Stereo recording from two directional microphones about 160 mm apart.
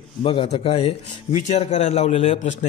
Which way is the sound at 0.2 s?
35° left (ahead or behind).